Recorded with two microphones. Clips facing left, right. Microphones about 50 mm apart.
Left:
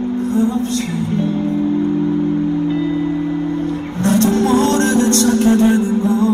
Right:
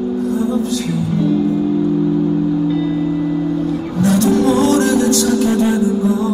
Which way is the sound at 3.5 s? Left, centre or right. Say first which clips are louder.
Right 2 dB; left.